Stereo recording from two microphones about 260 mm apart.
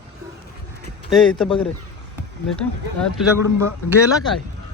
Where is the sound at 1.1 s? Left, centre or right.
Centre.